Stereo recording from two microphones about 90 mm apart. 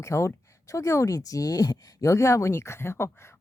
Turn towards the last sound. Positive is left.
turn(degrees=30)  # may be behind; listen again after turning